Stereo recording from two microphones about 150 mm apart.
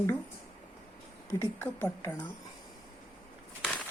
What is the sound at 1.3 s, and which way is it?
Speech, 15° left (ahead or behind).